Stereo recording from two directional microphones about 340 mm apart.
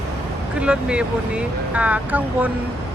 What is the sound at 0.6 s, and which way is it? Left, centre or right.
Speech, centre.